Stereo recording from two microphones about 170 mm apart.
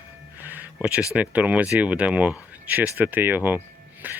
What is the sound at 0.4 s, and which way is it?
Music, 10° right (ahead or behind).